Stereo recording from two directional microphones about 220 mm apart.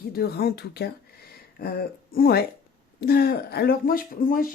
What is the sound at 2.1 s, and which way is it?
A woman's voice, 45° left (ahead or behind).